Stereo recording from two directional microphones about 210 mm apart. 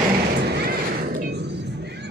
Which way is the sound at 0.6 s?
45° right (ahead or behind).